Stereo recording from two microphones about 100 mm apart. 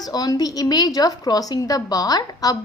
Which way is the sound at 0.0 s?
40° left (ahead or behind).